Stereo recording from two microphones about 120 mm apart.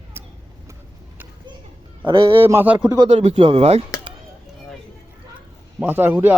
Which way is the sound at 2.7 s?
35° right (ahead or behind).